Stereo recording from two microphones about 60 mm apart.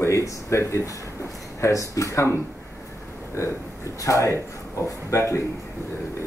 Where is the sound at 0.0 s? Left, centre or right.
Left.